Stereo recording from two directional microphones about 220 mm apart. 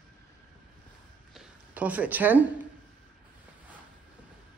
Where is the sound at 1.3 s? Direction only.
5° right (ahead or behind).